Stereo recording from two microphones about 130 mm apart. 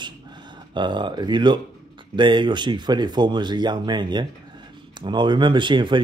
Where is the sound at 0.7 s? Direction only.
35° right (ahead or behind).